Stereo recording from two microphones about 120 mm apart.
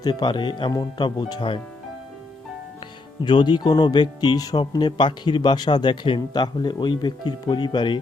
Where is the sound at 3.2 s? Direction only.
40° left (ahead or behind).